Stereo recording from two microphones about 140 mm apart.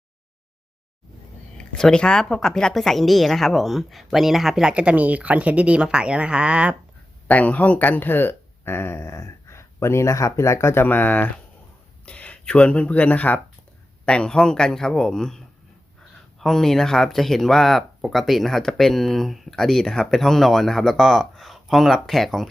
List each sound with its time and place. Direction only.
1.5 s speech: 5° left (ahead or behind)
7.3 s speech: 10° left (ahead or behind)
16.4 s speech: 5° left (ahead or behind)